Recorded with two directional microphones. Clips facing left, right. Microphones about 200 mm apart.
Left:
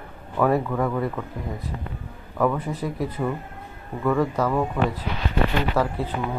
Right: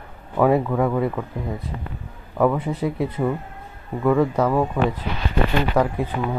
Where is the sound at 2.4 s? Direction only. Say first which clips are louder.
Right 4 dB; 20° right (ahead or behind).